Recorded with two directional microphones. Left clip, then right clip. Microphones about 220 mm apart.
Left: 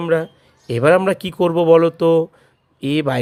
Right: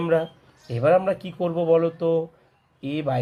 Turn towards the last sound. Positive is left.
turn(degrees=40)  # may be behind; listen again after turning